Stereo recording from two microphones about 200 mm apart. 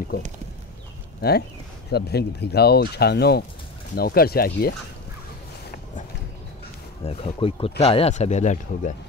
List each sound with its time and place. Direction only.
1.2 s speech: 50° left (ahead or behind)
7.0 s speech: 30° left (ahead or behind)